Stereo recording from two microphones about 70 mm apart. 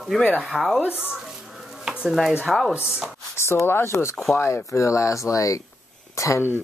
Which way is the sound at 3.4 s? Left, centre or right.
Left.